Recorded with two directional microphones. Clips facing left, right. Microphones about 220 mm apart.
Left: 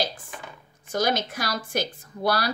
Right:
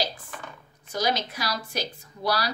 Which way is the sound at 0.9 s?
50° left (ahead or behind).